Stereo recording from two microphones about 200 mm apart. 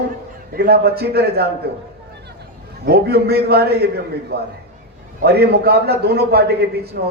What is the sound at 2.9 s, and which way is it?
A man's voice, 50° right (ahead or behind).